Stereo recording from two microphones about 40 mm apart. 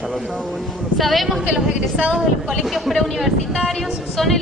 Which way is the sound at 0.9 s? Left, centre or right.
Centre.